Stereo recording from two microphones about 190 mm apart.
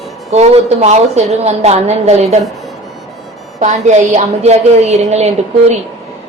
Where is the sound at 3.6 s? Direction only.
40° right (ahead or behind).